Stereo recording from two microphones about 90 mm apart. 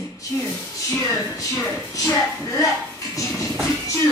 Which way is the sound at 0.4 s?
30° left (ahead or behind).